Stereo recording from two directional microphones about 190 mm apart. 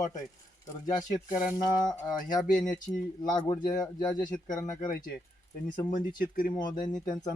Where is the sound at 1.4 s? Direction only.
45° left (ahead or behind).